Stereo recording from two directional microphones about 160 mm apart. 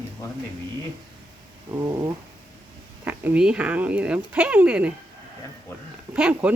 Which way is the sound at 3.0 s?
10° right (ahead or behind).